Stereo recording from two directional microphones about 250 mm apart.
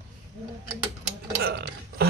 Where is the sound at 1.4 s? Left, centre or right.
Right.